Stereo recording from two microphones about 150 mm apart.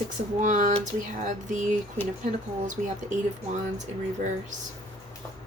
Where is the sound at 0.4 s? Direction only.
55° right (ahead or behind).